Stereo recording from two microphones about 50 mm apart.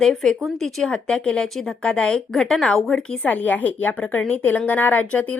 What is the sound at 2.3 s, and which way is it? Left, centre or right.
Speech, centre.